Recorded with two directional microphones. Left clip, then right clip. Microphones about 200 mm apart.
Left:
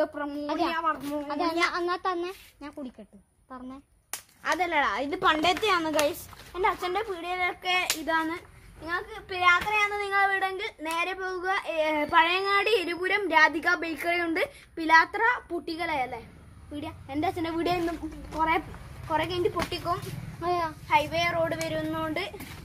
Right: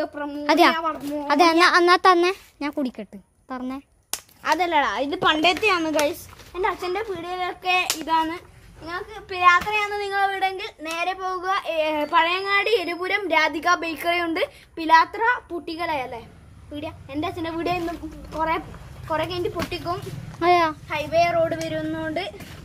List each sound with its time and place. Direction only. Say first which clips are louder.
0.5 s a woman's voice: right 13 dB; 55° right (ahead or behind)
0.7 s a woman's voice: right 2 dB; 5° right (ahead or behind)
1.2 s a woman's voice: right 12 dB; 55° right (ahead or behind)
4.1 s a child's voice: right 6 dB; 35° right (ahead or behind); by 7.9 s 10° right (ahead or behind)
8.1 s a child's voice: right 6 dB; 20° right (ahead or behind)
8.8 s a woman's voice: right 1 dB; centre (ahead or behind)
10.8 s a child's voice: right 4 dB; 5° right (ahead or behind); by 16.2 s 20° right (ahead or behind)
16.7 s a woman's voice: right 3 dB; 5° right (ahead or behind)
20.3 s a child's voice: right 10 dB; 45° right (ahead or behind)
20.9 s a woman's voice: right 2 dB; 5° left (ahead or behind)
21.5 s speech: right 3 dB; 15° left (ahead or behind)